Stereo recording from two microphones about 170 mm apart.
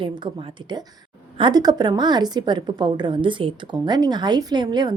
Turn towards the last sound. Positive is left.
turn(degrees=-25)  # may be behind; listen again after turning